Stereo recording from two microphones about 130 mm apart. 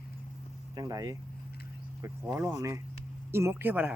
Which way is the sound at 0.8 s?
25° right (ahead or behind).